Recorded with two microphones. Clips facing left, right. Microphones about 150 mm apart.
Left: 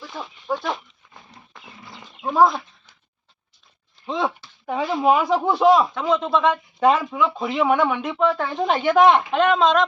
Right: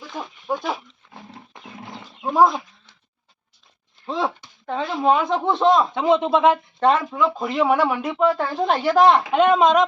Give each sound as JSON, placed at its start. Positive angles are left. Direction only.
{"t": 0.1, "sound": "a sound", "side_deg": -10}
{"t": 4.0, "sound": "a sound", "side_deg": 0}
{"t": 4.6, "sound": "speech", "side_deg": 5}
{"t": 5.9, "sound": "speech", "side_deg": -25}
{"t": 6.7, "sound": "speech", "side_deg": 5}
{"t": 9.5, "sound": "speech", "side_deg": -15}